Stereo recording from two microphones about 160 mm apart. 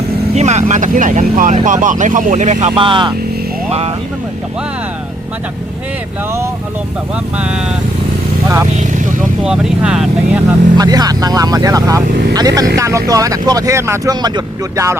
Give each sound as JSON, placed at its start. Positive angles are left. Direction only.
{"t": 0.3, "sound": "speech", "side_deg": -45}
{"t": 2.6, "sound": "speech", "side_deg": -30}
{"t": 7.3, "sound": "speech", "side_deg": -5}
{"t": 9.4, "sound": "speech", "side_deg": -5}
{"t": 10.8, "sound": "speech", "side_deg": -25}